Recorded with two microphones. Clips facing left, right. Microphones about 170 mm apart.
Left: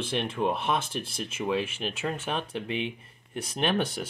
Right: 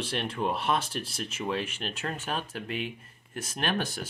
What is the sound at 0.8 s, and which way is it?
Speech, 55° left (ahead or behind).